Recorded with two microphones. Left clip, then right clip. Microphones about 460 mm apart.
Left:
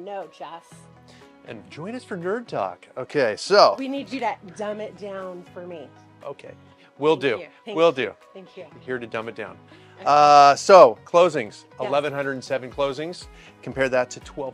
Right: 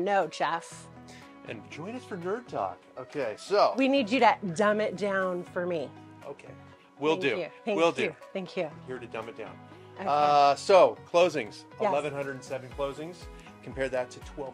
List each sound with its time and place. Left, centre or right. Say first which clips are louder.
0.0 s speech: right 7 dB; right
1.4 s speech: left 4 dB; left
3.8 s a woman's voice: right 5 dB; right
6.3 s speech: left 7 dB; left
7.0 s speech: left 7 dB; left
7.3 s a woman's voice: right 1 dB; right
7.7 s speech: left 6 dB; left
8.8 s speech: left 8 dB; left
10.0 s speech: left 9 dB; left
11.9 s speech: left 7 dB; left
13.7 s speech: left 9 dB; left